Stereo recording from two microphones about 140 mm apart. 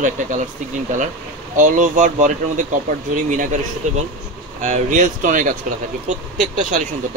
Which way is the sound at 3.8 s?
55° right (ahead or behind).